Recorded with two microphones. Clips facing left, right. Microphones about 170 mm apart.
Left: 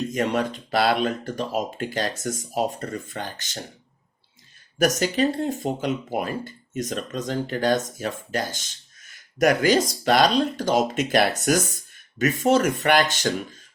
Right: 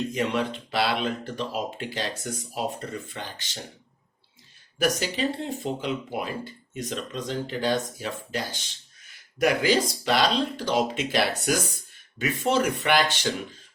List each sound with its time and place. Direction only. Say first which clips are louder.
0.1 s speech: left 3 dB; 45° left (ahead or behind)
4.8 s speech: left 5 dB; 50° left (ahead or behind)